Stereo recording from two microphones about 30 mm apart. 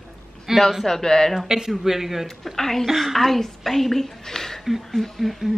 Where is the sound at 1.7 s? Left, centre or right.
Centre.